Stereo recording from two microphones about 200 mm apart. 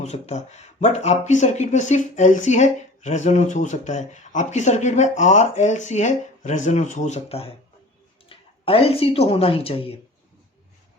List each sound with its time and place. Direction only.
0.0 s speech: 35° left (ahead or behind)